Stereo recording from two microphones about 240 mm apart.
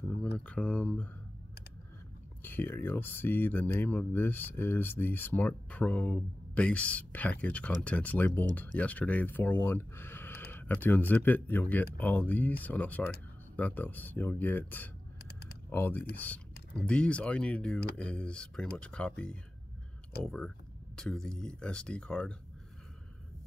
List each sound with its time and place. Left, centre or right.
0.4 s speech: centre
2.4 s speech: centre